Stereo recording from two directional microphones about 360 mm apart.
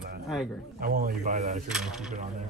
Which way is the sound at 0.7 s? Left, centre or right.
Right.